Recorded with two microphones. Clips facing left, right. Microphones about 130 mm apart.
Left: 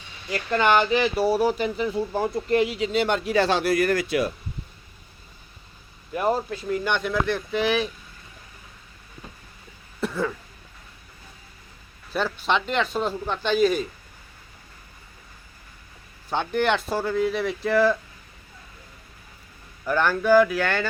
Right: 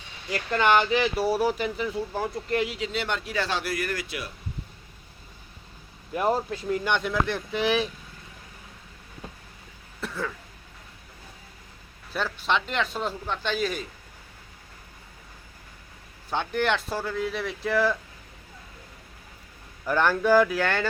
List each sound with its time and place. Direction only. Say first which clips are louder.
0.6 s speech: left 1 dB; 15° right (ahead or behind)
0.9 s speech: left 3 dB; 25° left (ahead or behind)
1.3 s speech: left 3 dB; 10° right (ahead or behind)
1.9 s speech: left 4 dB; 30° left (ahead or behind)
2.5 s speech: left 6 dB; centre (ahead or behind)
3.0 s speech: left 9 dB; 20° left (ahead or behind)
3.9 s speech: left 11 dB; 40° left (ahead or behind)
6.1 s speech: left 1 dB; 20° right (ahead or behind)
10.0 s cough: left 6 dB; 10° left (ahead or behind)
12.1 s speech: left 3 dB; centre (ahead or behind)
16.3 s speech: left 3 dB; centre (ahead or behind)
19.9 s speech: left 2 dB; 25° right (ahead or behind)